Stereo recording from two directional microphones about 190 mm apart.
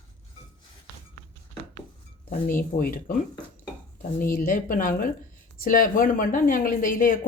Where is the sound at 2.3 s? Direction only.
45° left (ahead or behind).